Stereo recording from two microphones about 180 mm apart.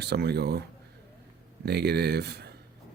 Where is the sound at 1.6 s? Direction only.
65° right (ahead or behind).